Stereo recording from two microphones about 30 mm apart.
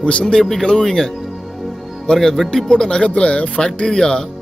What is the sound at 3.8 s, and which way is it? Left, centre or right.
Speech, left.